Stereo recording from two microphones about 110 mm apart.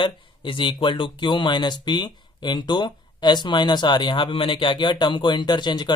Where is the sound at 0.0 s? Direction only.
50° left (ahead or behind).